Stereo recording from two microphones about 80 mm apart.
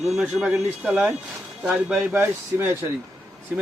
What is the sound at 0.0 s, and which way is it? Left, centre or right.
Speech, centre.